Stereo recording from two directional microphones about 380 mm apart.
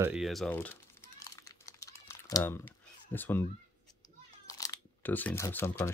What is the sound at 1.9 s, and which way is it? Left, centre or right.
Typing, centre.